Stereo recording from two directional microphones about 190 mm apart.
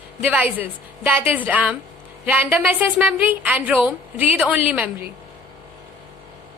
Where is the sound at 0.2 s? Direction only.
10° right (ahead or behind).